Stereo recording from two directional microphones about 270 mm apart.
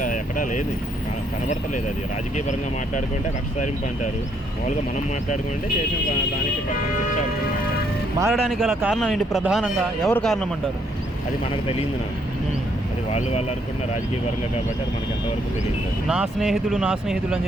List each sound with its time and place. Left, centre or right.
0.0 s vehicle: left
8.2 s speech: centre
13.1 s speech: left
16.0 s speech: centre